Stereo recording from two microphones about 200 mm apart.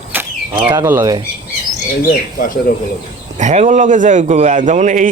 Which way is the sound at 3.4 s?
35° right (ahead or behind).